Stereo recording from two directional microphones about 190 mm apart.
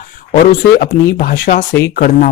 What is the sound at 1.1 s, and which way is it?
Speech, 50° left (ahead or behind).